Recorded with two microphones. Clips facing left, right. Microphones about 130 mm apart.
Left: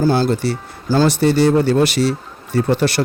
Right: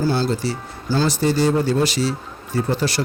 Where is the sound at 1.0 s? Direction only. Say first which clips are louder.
Left 4 dB; 65° left (ahead or behind).